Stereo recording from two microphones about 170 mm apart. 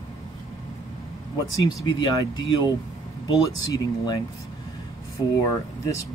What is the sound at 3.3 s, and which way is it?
Speech, 20° left (ahead or behind).